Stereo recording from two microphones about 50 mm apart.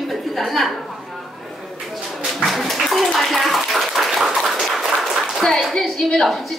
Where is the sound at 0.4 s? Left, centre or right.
Centre.